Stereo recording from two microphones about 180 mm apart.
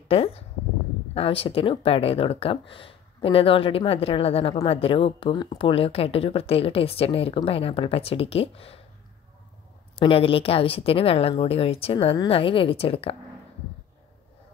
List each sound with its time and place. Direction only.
0.1 s a sound: 35° left (ahead or behind)
1.1 s speech: 30° left (ahead or behind)
9.9 s speech: 30° left (ahead or behind)